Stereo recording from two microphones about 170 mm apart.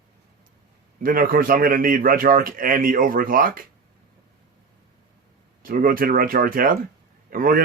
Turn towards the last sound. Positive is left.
turn(degrees=-55)  # may be behind; listen again after turning